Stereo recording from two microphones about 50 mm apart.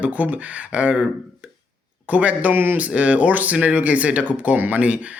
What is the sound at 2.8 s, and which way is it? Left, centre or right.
Speech, right.